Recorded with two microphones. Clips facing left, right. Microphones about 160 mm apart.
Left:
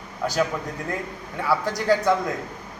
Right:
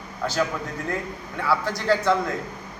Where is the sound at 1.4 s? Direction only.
15° left (ahead or behind).